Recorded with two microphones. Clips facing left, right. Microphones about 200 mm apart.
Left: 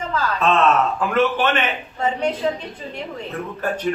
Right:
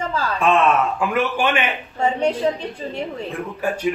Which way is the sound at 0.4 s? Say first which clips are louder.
Right 1 dB; 10° right (ahead or behind).